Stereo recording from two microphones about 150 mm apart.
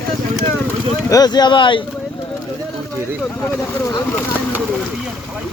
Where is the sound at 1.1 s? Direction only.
25° left (ahead or behind).